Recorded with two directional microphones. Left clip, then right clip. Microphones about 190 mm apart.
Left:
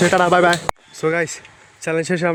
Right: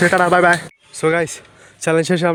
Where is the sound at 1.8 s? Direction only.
20° right (ahead or behind).